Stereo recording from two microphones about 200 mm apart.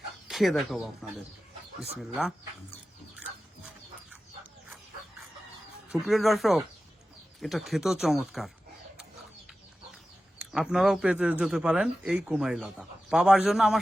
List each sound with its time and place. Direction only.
0.3 s speech: centre (ahead or behind)
2.0 s a man's voice: centre (ahead or behind)
5.9 s a man's voice: centre (ahead or behind)
10.3 s a man's voice: 5° right (ahead or behind)